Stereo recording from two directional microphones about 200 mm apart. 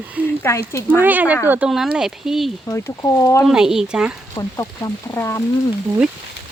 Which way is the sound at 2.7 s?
15° left (ahead or behind).